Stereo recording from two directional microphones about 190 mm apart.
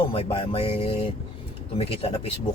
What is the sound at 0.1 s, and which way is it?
A man's voice, 30° left (ahead or behind).